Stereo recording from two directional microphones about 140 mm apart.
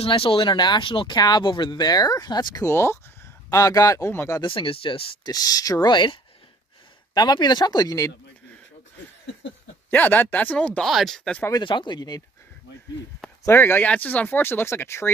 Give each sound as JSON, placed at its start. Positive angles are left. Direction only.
{"t": 0.0, "sound": "speech", "side_deg": 40}
{"t": 4.4, "sound": "speech", "side_deg": 40}
{"t": 5.2, "sound": "speech", "side_deg": 25}
{"t": 7.2, "sound": "speech", "side_deg": 30}
{"t": 9.8, "sound": "speech", "side_deg": 15}
{"t": 11.6, "sound": "speech", "side_deg": 35}
{"t": 13.5, "sound": "speech", "side_deg": 15}